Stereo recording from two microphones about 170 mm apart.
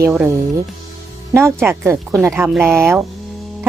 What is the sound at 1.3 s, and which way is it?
A woman's voice, 15° right (ahead or behind).